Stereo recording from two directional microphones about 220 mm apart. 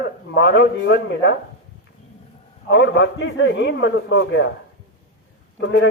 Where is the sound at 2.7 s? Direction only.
55° left (ahead or behind).